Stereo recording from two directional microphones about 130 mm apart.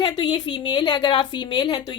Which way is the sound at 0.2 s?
40° left (ahead or behind).